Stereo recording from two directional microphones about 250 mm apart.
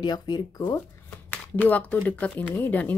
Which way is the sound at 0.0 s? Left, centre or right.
Centre.